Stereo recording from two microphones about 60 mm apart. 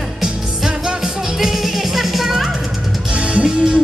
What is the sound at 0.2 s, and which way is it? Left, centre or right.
Music, centre.